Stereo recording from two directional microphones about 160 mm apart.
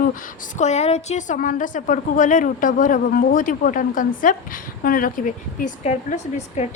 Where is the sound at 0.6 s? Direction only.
45° left (ahead or behind).